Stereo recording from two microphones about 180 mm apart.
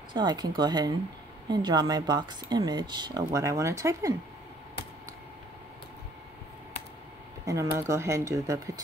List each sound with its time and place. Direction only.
0.1 s speech: 25° right (ahead or behind)
7.4 s speech: 15° right (ahead or behind)